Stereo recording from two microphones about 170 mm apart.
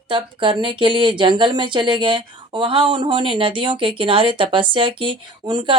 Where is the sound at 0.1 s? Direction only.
30° right (ahead or behind).